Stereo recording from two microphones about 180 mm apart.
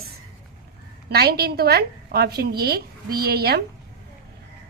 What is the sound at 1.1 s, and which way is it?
A woman's voice, 60° right (ahead or behind).